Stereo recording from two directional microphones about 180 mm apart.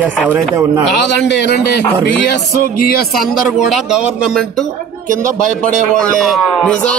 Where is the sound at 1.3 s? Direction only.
70° left (ahead or behind).